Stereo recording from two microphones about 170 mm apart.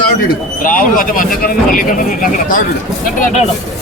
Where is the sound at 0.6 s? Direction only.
55° left (ahead or behind).